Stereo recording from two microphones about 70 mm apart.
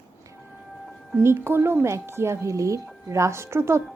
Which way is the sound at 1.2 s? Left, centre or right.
Right.